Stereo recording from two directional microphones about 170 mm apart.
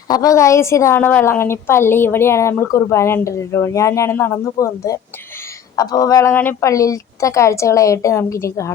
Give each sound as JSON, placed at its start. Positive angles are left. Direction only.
{"t": 0.1, "sound": "a woman's voice", "side_deg": 20}